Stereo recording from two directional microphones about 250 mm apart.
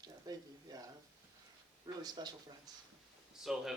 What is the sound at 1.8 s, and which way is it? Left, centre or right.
Speech, centre.